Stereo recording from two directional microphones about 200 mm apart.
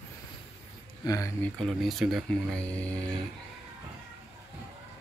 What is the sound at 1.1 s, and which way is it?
Speech, 15° left (ahead or behind).